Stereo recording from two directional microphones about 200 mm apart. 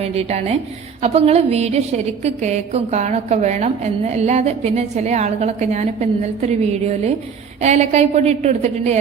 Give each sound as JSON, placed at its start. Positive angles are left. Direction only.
{"t": 0.0, "sound": "a woman's voice", "side_deg": -30}